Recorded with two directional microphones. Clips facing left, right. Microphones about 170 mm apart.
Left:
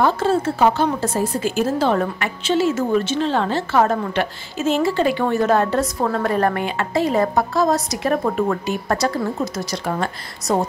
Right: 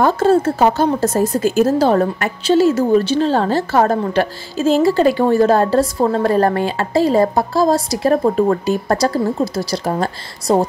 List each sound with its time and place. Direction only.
0.0 s speech: 40° right (ahead or behind)